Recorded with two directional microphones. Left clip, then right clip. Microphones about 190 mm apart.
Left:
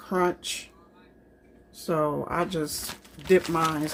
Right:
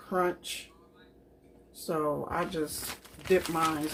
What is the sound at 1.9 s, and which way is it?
Speech, 55° left (ahead or behind).